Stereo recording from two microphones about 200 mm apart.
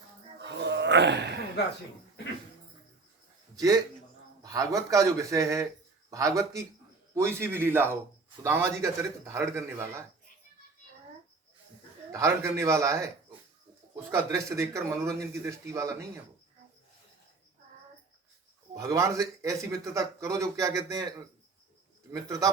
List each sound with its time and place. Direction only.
0.3 s a sound: 60° right (ahead or behind)
4.4 s speech: 15° right (ahead or behind)
12.1 s speech: 15° right (ahead or behind)
14.1 s speech: 15° right (ahead or behind)
18.7 s speech: 15° right (ahead or behind)
22.1 s speech: 15° right (ahead or behind)